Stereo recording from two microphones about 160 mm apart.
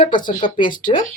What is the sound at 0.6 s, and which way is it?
Speech, 55° left (ahead or behind).